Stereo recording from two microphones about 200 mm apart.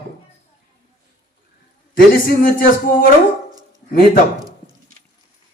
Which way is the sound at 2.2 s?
45° left (ahead or behind).